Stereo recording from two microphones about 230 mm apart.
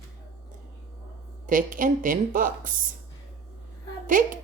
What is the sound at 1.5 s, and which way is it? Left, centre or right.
A woman's voice, right.